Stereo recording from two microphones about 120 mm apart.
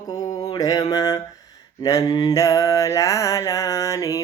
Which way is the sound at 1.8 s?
30° left (ahead or behind).